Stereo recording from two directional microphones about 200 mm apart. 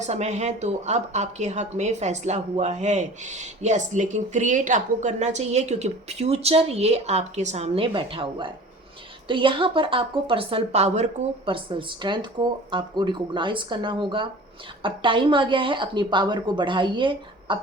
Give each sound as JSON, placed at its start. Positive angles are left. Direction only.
{"t": 0.0, "sound": "a woman's voice", "side_deg": -35}